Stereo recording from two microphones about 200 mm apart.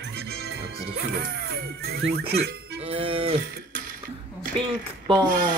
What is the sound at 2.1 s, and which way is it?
Speech, 55° right (ahead or behind).